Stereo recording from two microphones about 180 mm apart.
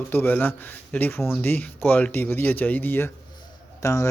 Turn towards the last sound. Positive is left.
turn(degrees=15)  # may be behind; listen again after turning